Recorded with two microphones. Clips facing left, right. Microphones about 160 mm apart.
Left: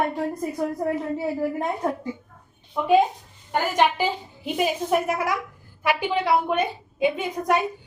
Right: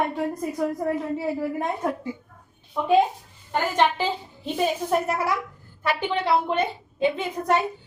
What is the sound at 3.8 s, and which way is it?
Speech, 10° left (ahead or behind).